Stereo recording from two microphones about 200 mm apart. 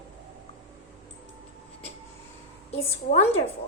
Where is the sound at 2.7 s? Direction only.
30° left (ahead or behind).